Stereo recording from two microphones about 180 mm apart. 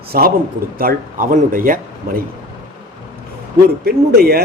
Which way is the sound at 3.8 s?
60° right (ahead or behind).